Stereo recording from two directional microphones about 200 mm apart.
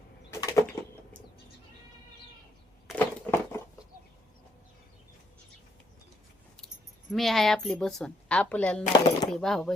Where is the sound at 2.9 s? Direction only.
10° left (ahead or behind).